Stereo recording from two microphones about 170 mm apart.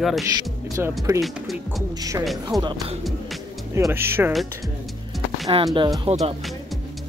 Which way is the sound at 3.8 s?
15° right (ahead or behind).